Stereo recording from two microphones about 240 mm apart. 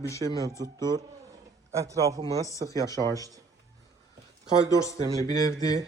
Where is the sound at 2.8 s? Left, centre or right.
Centre.